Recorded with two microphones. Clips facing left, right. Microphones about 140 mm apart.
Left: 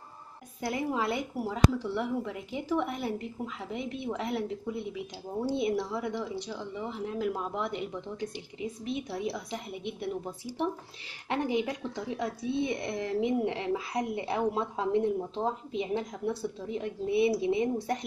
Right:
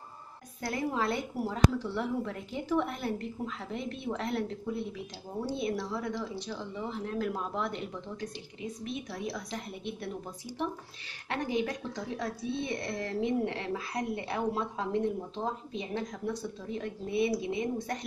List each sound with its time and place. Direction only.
0.6 s a woman's voice: 15° left (ahead or behind)
11.2 s a woman's voice: 20° left (ahead or behind)